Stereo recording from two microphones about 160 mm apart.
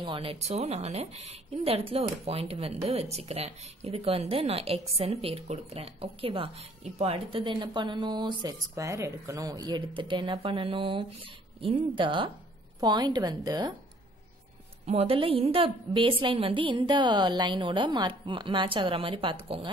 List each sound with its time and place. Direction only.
0.0 s a woman's voice: 35° right (ahead or behind)
14.9 s a woman's voice: 40° right (ahead or behind)